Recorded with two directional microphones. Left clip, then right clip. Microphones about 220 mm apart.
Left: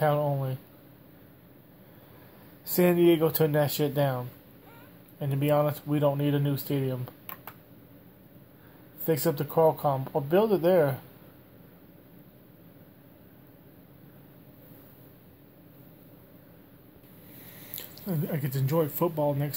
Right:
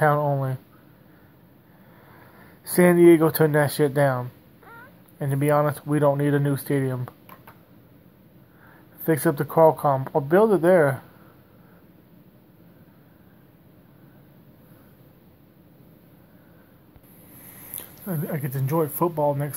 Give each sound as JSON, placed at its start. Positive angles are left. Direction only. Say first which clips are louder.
{"t": 0.0, "sound": "speech", "louder": "right 5 dB", "side_deg": -25}
{"t": 2.6, "sound": "speech", "louder": "right 7 dB", "side_deg": -25}
{"t": 9.0, "sound": "speech", "louder": "right 5 dB", "side_deg": -25}
{"t": 17.7, "sound": "speech", "louder": "right 2 dB", "side_deg": 0}
{"t": 18.9, "sound": "speech", "louder": "right 5 dB", "side_deg": -15}